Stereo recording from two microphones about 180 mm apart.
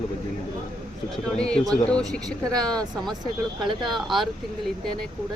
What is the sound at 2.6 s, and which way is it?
Speech, 20° right (ahead or behind).